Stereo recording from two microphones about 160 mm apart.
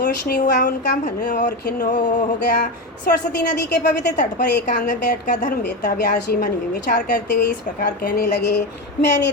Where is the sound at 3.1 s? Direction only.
65° left (ahead or behind).